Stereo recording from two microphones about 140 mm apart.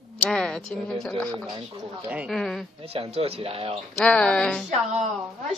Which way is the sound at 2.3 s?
5° left (ahead or behind).